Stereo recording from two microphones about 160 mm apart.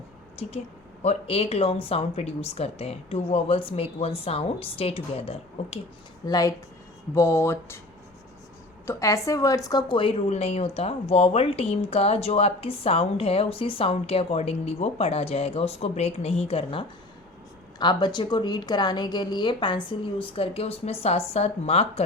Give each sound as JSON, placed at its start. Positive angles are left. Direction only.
{"t": 1.0, "sound": "speech", "side_deg": 40}
{"t": 6.2, "sound": "a woman's voice", "side_deg": 25}
{"t": 8.9, "sound": "a woman's voice", "side_deg": 20}
{"t": 10.2, "sound": "a woman's voice", "side_deg": 40}